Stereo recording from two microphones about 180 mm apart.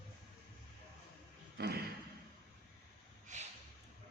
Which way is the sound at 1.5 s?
60° right (ahead or behind).